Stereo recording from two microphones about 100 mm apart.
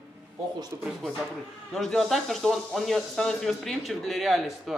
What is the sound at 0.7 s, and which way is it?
Speech, 30° right (ahead or behind).